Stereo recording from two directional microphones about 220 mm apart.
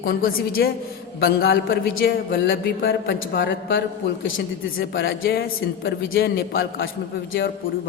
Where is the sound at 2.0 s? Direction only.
45° left (ahead or behind).